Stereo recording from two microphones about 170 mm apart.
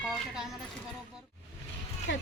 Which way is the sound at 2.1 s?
90° left.